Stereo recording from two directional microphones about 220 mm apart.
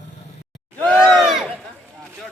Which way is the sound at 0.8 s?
5° left (ahead or behind).